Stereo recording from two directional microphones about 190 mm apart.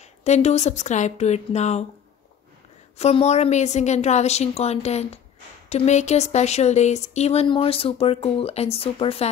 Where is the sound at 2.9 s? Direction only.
35° left (ahead or behind).